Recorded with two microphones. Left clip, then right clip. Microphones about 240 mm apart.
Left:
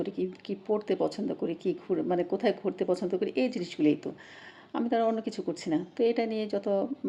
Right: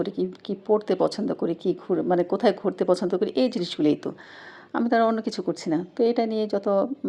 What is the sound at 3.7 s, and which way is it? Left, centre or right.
Speech, right.